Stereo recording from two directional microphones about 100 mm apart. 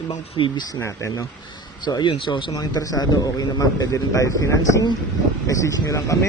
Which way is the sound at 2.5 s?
40° left (ahead or behind).